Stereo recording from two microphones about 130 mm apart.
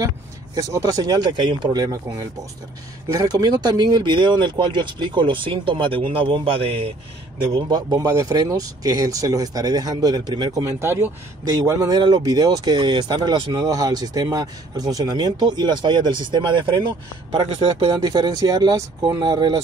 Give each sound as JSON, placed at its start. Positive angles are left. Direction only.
{"t": 0.6, "sound": "speech", "side_deg": -30}
{"t": 7.5, "sound": "speech", "side_deg": -35}
{"t": 11.4, "sound": "speech", "side_deg": -30}
{"t": 17.6, "sound": "speech", "side_deg": -45}
{"t": 17.9, "sound": "speech", "side_deg": -35}